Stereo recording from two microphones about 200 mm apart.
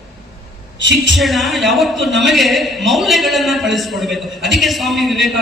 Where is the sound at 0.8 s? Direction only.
65° right (ahead or behind).